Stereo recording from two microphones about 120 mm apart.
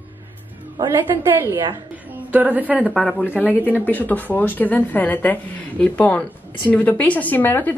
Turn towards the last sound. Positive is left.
turn(degrees=15)  # may be behind; listen again after turning